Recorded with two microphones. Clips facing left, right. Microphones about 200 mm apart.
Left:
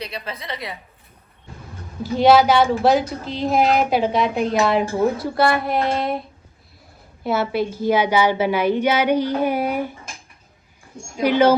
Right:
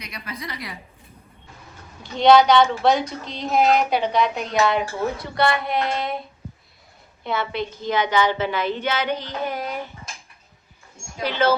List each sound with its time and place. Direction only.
0.0 s a woman's voice: 30° left (ahead or behind)
2.0 s a woman's voice: 5° left (ahead or behind)
7.3 s a woman's voice: 5° left (ahead or behind)
11.2 s a woman's voice: 10° left (ahead or behind)